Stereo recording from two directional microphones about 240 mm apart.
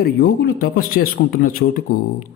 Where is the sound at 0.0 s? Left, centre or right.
Left.